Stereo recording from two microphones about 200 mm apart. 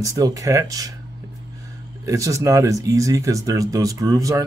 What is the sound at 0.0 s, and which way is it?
Speech, 15° right (ahead or behind).